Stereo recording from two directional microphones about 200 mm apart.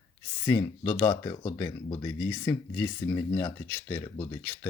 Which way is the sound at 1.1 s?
25° left (ahead or behind).